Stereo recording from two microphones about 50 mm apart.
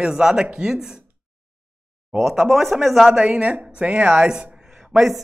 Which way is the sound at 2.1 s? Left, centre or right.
Centre.